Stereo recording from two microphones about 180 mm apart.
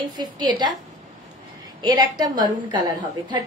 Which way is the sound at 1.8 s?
20° right (ahead or behind).